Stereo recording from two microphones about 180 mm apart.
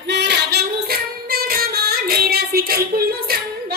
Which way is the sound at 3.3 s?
55° right (ahead or behind).